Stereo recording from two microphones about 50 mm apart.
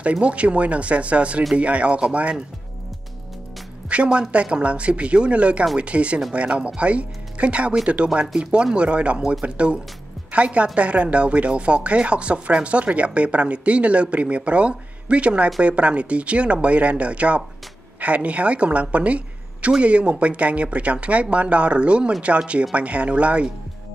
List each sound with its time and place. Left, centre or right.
0.0 s speech: right
3.9 s a woman's voice: right